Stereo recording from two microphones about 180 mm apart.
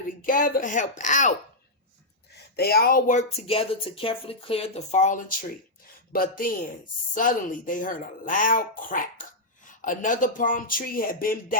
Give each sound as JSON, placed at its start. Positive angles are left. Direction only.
{"t": 0.2, "sound": "speech", "side_deg": 50}
{"t": 2.3, "sound": "speech", "side_deg": 60}